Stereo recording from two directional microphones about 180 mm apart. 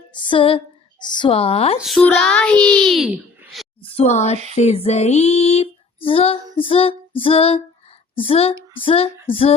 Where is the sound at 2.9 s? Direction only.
5° right (ahead or behind).